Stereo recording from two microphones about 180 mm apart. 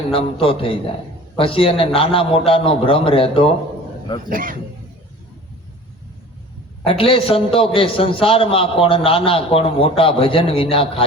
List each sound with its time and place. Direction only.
0.1 s a man's voice: 30° left (ahead or behind)
4.3 s speech: 50° right (ahead or behind)
6.8 s a man's voice: 30° left (ahead or behind)